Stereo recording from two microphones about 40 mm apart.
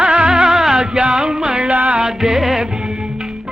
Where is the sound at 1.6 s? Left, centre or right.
Right.